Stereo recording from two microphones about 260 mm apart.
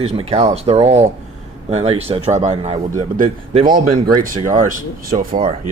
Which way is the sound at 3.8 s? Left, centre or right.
Right.